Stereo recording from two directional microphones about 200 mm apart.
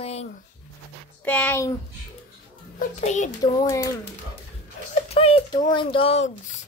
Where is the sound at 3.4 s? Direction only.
20° left (ahead or behind).